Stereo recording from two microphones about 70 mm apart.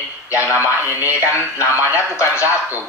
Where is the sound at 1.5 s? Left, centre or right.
Left.